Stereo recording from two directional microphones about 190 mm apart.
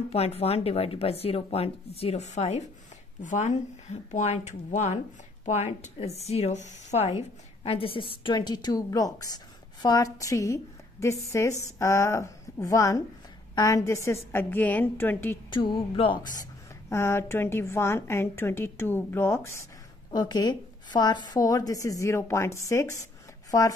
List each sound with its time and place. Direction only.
0.1 s a woman's voice: 30° left (ahead or behind); by 15.3 s 10° left (ahead or behind)
15.5 s a woman's voice: 25° left (ahead or behind)
16.9 s a woman's voice: 10° left (ahead or behind)